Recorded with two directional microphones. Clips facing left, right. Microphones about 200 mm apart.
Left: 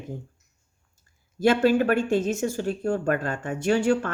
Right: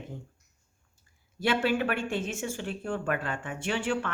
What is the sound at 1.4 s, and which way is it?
Speech, 40° left (ahead or behind).